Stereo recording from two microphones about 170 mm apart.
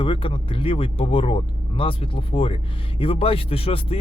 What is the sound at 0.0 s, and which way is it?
Speech, 30° left (ahead or behind).